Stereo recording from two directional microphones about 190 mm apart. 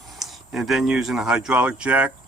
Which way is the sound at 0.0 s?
Centre (ahead or behind).